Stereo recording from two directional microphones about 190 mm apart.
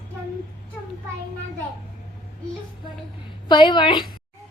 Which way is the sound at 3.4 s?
25° left (ahead or behind).